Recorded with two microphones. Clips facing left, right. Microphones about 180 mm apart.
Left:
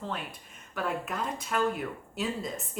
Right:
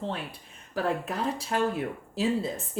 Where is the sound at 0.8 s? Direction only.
35° right (ahead or behind).